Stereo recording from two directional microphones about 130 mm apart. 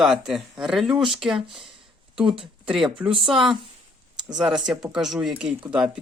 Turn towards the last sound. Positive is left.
turn(degrees=-5)  # may be behind; listen again after turning